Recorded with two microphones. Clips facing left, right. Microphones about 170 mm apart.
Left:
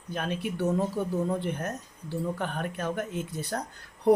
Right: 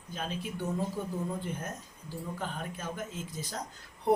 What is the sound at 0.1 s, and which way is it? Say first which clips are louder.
Speech: left 6 dB; 70° left (ahead or behind).